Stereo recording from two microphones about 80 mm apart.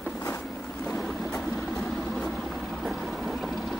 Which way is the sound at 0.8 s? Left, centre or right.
Centre.